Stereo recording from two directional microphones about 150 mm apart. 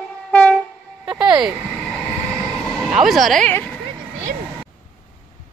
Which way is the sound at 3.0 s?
Centre (ahead or behind).